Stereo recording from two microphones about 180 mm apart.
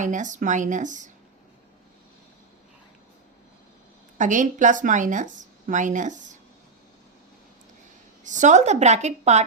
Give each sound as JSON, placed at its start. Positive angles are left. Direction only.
{"t": 0.0, "sound": "a woman's voice", "side_deg": -45}
{"t": 4.2, "sound": "a woman's voice", "side_deg": -45}
{"t": 8.2, "sound": "a woman's voice", "side_deg": -45}